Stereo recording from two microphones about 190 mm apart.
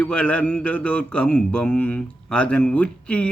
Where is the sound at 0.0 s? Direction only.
5° left (ahead or behind).